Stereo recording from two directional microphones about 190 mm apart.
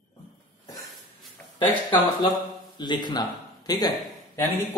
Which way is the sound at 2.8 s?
25° left (ahead or behind).